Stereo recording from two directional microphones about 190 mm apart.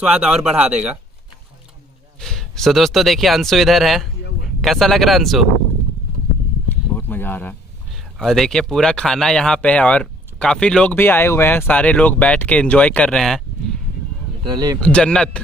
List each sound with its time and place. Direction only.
0.0 s speech: 5° right (ahead or behind)
2.1 s speech: centre (ahead or behind)
6.7 s a sound: 10° left (ahead or behind)
7.9 s speech: centre (ahead or behind)
14.4 s speech: 20° right (ahead or behind)
14.8 s speech: 5° left (ahead or behind)